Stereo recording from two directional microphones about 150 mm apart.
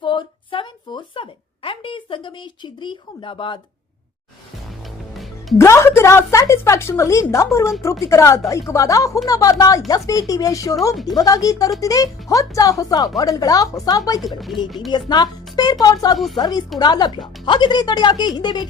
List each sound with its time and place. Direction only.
0.0 s a sound: 35° left (ahead or behind)
5.1 s music: centre (ahead or behind)
5.5 s a woman's voice: 20° left (ahead or behind)
14.2 s speech: centre (ahead or behind)
14.8 s a woman's voice: 30° left (ahead or behind)
16.1 s speech: centre (ahead or behind)
16.4 s a woman's voice: 25° left (ahead or behind)